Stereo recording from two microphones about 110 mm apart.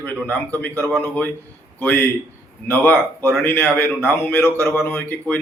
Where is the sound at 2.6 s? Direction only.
20° left (ahead or behind).